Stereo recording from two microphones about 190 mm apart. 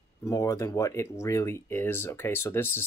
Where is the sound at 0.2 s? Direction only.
15° left (ahead or behind).